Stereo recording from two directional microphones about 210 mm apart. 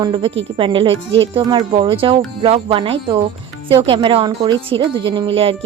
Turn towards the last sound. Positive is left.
turn(degrees=-25)  # may be behind; listen again after turning